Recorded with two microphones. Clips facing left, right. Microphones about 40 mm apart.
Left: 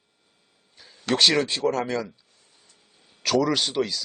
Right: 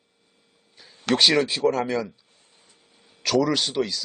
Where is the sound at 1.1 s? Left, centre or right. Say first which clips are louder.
Right 1 dB; centre.